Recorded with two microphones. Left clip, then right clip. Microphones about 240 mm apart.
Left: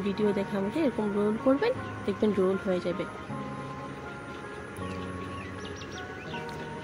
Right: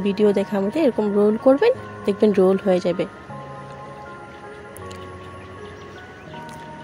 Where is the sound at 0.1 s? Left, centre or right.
Right.